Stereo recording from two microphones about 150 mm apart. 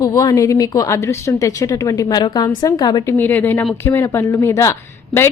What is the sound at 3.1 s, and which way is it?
A woman's voice, 10° left (ahead or behind).